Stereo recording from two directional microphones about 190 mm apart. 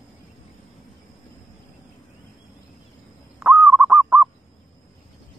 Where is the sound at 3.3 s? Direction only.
5° right (ahead or behind).